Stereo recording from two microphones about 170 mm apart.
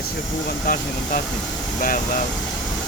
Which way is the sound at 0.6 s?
55° left (ahead or behind).